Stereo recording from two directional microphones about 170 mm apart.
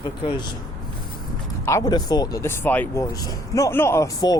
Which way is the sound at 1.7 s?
20° left (ahead or behind).